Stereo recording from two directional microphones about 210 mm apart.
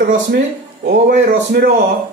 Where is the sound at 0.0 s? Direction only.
45° right (ahead or behind).